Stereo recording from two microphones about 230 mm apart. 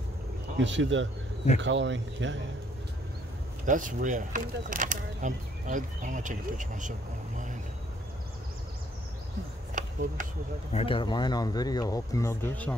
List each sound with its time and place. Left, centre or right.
0.6 s speech: right
3.6 s speech: right
9.8 s a sound: right
10.7 s speech: left; by 12.7 s centre